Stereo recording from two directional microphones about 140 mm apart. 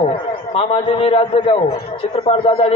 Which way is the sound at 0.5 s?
40° left (ahead or behind).